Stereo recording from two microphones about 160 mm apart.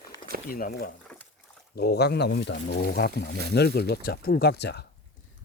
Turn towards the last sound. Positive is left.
turn(degrees=90)